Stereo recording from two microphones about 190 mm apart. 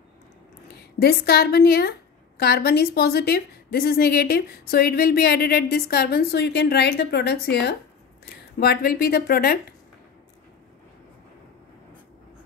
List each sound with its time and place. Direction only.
1.0 s a woman's voice: 55° left (ahead or behind)
8.5 s speech: 55° left (ahead or behind)